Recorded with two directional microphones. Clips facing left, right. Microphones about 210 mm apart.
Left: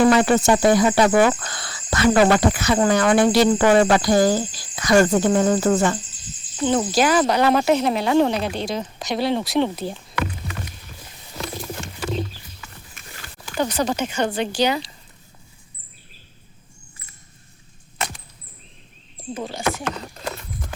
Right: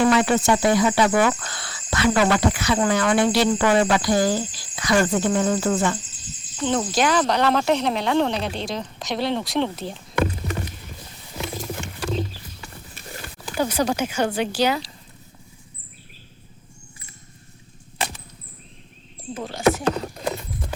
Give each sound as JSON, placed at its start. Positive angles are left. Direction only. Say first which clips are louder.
{"t": 0.1, "sound": "speech", "louder": "left 2 dB", "side_deg": 45}
{"t": 6.6, "sound": "speech", "louder": "left 3 dB", "side_deg": 5}
{"t": 11.4, "sound": "wild animals", "louder": "right 1 dB", "side_deg": -5}
{"t": 13.6, "sound": "speech", "louder": "even", "side_deg": -10}
{"t": 19.3, "sound": "speech", "louder": "left 2 dB", "side_deg": 0}
{"t": 19.9, "sound": "horse", "louder": "right 5 dB", "side_deg": -10}